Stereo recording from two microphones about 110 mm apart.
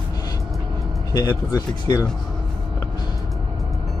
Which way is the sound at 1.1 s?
35° left (ahead or behind).